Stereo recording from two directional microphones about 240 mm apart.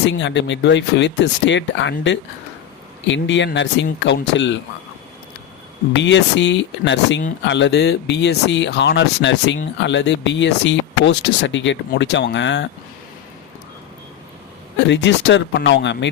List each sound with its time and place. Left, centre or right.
0.0 s speech: left
5.9 s speech: left
14.8 s speech: left